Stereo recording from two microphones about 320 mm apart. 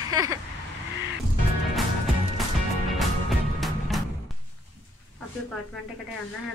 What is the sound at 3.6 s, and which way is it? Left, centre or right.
Music, centre.